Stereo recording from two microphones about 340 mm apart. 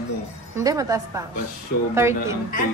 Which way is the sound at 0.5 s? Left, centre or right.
Centre.